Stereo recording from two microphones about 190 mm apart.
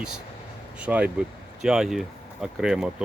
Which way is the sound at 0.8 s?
5° right (ahead or behind).